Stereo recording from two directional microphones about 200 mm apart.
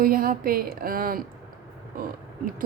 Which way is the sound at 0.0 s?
45° right (ahead or behind).